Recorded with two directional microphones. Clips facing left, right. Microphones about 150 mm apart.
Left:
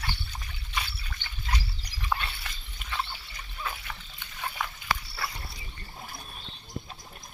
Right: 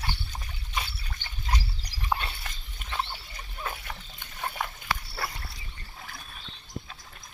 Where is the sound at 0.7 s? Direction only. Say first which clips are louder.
Right 1 dB; 35° right (ahead or behind).